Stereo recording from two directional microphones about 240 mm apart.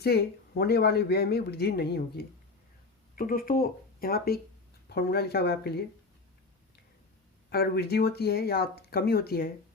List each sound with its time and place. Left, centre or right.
0.0 s speech: left
7.5 s speech: left